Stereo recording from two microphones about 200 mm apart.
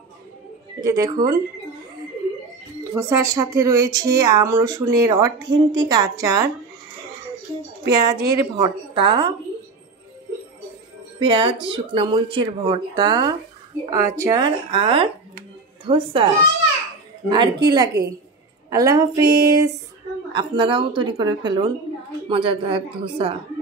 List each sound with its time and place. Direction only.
0.8 s a woman's voice: 15° right (ahead or behind)
2.9 s a woman's voice: 10° right (ahead or behind)
7.9 s speech: 20° right (ahead or behind)
11.1 s speech: 30° right (ahead or behind)
17.3 s a woman's voice: 20° right (ahead or behind)